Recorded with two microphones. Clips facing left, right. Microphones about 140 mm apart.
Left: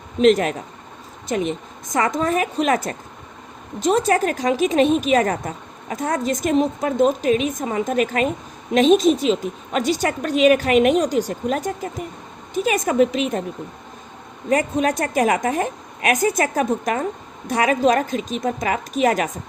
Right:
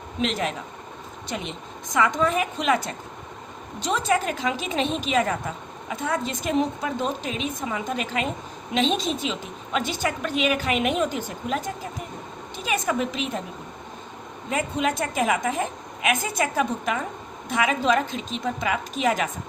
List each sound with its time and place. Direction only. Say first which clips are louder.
0.2 s a woman's voice: left 11 dB; 40° left (ahead or behind)
12.7 s a woman's voice: left 6 dB; 45° left (ahead or behind)
14.5 s a woman's voice: left 6 dB; 45° left (ahead or behind)